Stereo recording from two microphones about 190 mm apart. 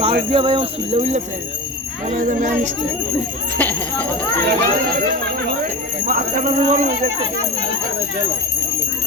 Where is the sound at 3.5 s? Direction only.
10° left (ahead or behind).